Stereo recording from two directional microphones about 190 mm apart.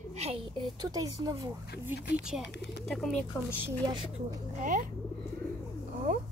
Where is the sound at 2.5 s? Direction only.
65° left (ahead or behind).